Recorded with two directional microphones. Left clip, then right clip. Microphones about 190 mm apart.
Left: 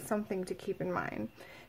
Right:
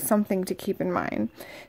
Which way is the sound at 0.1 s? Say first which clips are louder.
Right 10 dB; 35° right (ahead or behind).